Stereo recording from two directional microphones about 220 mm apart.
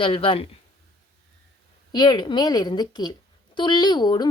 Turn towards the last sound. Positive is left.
turn(degrees=20)  # may be behind; listen again after turning